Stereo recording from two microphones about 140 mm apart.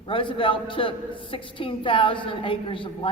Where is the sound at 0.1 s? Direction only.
40° left (ahead or behind).